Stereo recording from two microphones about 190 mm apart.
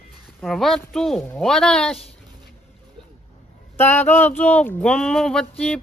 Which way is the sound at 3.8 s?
10° left (ahead or behind).